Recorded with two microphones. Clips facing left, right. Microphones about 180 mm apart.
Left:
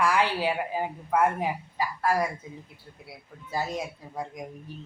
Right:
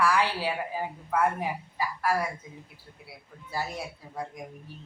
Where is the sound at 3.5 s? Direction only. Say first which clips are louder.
Left 3 dB; 20° left (ahead or behind).